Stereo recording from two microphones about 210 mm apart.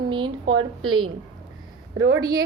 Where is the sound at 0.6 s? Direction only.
90° right.